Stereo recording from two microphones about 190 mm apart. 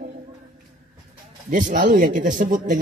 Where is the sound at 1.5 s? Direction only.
45° right (ahead or behind).